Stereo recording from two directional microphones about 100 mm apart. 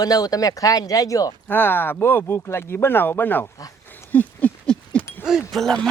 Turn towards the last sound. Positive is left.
turn(degrees=5)  # may be behind; listen again after turning